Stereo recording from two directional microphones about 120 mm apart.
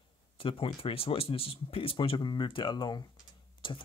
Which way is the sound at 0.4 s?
45° left (ahead or behind).